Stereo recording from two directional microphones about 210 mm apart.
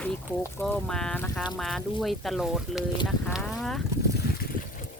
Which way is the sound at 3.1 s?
5° left (ahead or behind).